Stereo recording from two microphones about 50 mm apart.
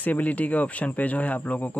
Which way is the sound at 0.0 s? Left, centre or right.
Left.